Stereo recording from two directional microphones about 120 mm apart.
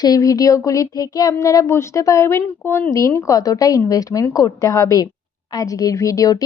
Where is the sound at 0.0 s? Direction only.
30° left (ahead or behind).